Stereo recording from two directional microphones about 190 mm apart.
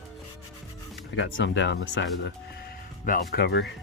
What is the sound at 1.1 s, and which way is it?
Speech, 75° left (ahead or behind).